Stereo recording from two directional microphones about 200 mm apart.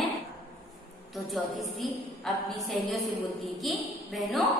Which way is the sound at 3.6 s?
Centre (ahead or behind).